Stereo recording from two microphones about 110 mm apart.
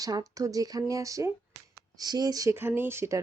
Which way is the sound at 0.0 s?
35° right (ahead or behind).